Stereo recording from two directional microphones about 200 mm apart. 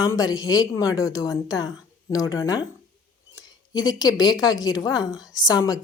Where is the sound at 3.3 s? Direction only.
20° left (ahead or behind).